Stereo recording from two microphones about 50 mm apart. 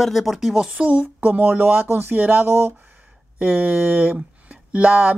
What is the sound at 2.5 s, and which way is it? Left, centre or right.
Speech, right.